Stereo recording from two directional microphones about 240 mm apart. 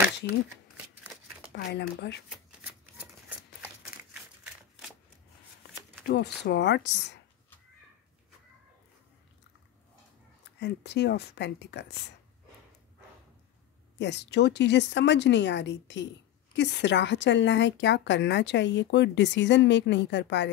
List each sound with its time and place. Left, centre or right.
1.5 s speech: left
6.0 s speech: left
10.6 s speech: left
13.9 s speech: left